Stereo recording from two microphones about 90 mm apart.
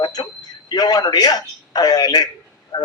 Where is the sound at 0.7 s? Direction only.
45° left (ahead or behind).